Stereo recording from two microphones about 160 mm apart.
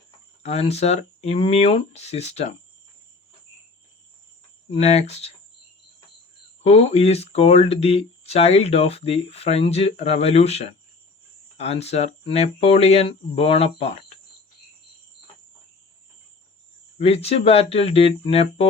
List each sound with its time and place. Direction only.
0.4 s speech: 40° left (ahead or behind)
4.7 s speech: 45° left (ahead or behind)
6.6 s speech: 40° left (ahead or behind)
17.0 s speech: 40° left (ahead or behind)